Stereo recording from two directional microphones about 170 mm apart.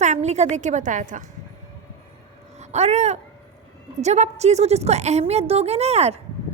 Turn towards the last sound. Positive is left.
turn(degrees=-40)  # may be behind; listen again after turning